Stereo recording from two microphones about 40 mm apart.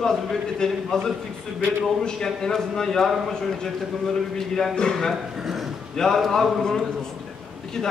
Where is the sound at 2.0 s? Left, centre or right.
Centre.